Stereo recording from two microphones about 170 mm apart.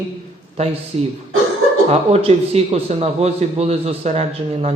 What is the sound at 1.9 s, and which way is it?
A man's voice, 35° right (ahead or behind).